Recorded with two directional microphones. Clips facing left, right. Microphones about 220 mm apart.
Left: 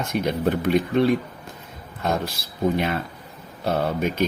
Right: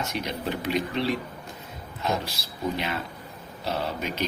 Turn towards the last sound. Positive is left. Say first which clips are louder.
# left 7 dB
turn(degrees=50)  # may be behind; listen again after turning